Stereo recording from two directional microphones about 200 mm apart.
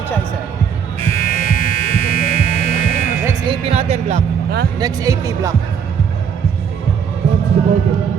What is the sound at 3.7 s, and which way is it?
Speech, 30° right (ahead or behind).